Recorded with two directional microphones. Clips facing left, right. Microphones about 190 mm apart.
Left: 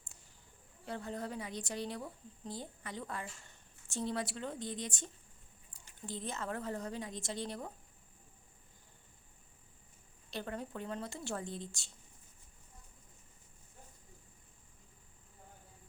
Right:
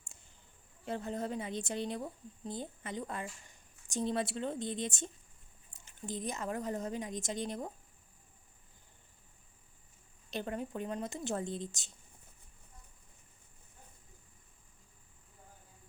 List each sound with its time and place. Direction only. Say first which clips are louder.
0.9 s a woman's voice: right 4 dB; 20° right (ahead or behind)
10.3 s a woman's voice: right 3 dB; 20° right (ahead or behind)